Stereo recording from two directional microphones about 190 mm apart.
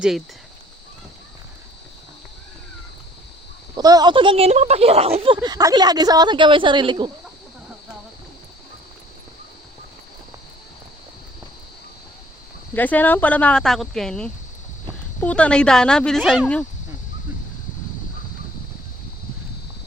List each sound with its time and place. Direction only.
3.8 s speech: 20° right (ahead or behind)
12.7 s speech: 10° left (ahead or behind)